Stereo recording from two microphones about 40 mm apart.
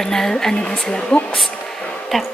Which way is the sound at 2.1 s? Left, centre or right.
Centre.